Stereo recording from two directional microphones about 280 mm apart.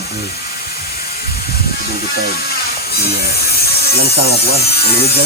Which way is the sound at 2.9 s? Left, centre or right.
Left.